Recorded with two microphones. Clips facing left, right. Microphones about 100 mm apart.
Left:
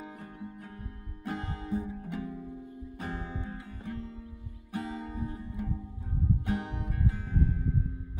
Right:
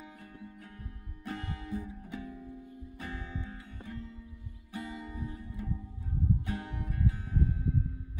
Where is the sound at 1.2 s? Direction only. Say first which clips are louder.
Left 3 dB; 35° left (ahead or behind).